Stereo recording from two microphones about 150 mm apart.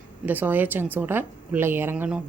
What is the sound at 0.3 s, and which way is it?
A woman's voice, 10° right (ahead or behind).